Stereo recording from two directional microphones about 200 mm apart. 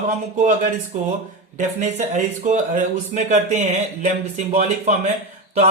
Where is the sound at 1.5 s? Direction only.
35° right (ahead or behind).